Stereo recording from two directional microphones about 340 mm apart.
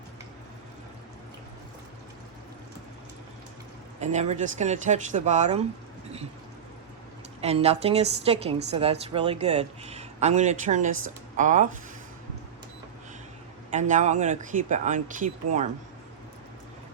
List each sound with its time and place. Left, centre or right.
4.0 s speech: centre
7.4 s speech: centre
13.7 s speech: right